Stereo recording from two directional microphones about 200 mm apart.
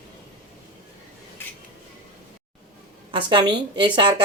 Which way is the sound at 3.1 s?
25° right (ahead or behind).